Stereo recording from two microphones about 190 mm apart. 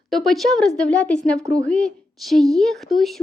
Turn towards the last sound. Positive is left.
turn(degrees=0)  # may be behind; listen again after turning